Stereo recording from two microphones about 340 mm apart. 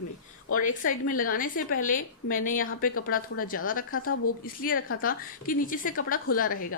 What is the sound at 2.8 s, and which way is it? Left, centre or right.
Speech, left.